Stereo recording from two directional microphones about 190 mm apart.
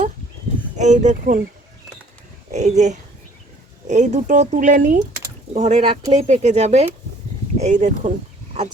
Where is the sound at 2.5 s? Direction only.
35° right (ahead or behind).